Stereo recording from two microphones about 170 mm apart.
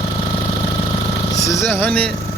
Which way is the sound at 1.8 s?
10° left (ahead or behind).